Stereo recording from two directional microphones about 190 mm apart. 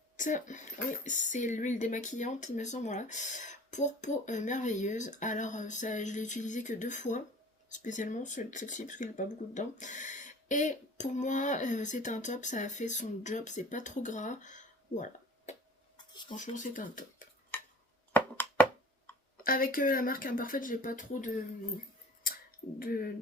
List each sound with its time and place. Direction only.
0.2 s speech: 40° left (ahead or behind)
18.1 s a sound: 10° left (ahead or behind)
19.4 s speech: 50° left (ahead or behind)
22.8 s speech: 50° left (ahead or behind)